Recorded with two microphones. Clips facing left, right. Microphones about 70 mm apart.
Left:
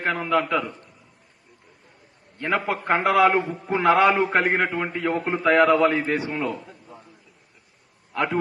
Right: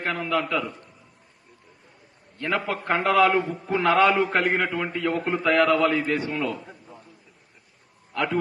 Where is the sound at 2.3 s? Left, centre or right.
Left.